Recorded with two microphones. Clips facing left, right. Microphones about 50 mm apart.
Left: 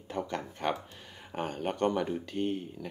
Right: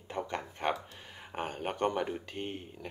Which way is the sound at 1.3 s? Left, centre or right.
Centre.